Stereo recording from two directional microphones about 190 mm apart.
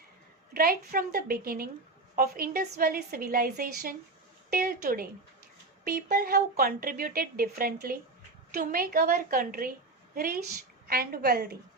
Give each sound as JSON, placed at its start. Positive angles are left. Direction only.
{"t": 0.5, "sound": "a woman's voice", "side_deg": -50}